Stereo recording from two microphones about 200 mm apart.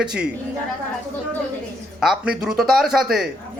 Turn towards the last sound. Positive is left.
turn(degrees=0)  # may be behind; listen again after turning